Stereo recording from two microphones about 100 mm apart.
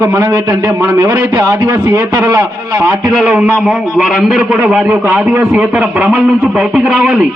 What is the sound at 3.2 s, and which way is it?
A man's voice, 10° right (ahead or behind).